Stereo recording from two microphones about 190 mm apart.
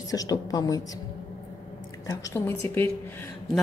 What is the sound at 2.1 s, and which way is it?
Speech, 15° left (ahead or behind).